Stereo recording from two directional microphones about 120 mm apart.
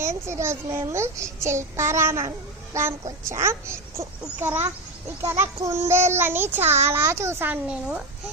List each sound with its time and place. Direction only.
0.0 s child singing: 25° right (ahead or behind)